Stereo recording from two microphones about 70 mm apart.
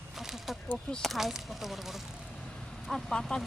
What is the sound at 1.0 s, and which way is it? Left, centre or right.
Speech, centre.